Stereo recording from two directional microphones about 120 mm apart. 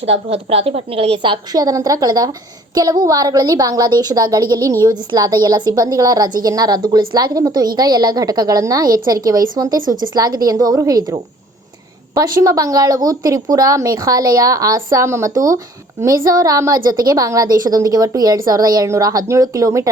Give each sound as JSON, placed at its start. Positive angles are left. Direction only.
{"t": 0.0, "sound": "a woman's voice", "side_deg": -60}